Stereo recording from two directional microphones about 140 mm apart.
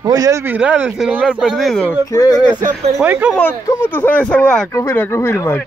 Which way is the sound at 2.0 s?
25° left (ahead or behind).